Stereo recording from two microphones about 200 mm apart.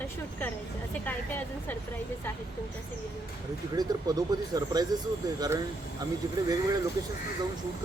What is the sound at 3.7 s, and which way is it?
Speech, 20° right (ahead or behind).